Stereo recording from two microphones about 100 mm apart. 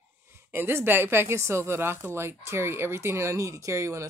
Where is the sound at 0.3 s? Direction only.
20° right (ahead or behind).